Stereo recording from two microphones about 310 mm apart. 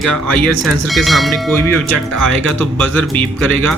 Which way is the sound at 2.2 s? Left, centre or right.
Centre.